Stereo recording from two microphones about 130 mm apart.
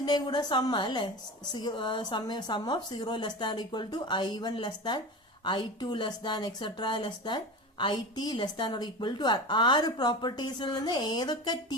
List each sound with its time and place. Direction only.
0.0 s speech: 30° left (ahead or behind)